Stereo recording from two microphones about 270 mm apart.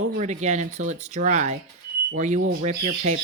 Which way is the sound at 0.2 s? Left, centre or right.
Right.